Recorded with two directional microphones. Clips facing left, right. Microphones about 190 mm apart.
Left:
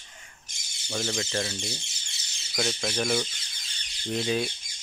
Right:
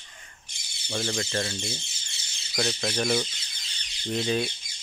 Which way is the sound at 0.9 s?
Centre (ahead or behind).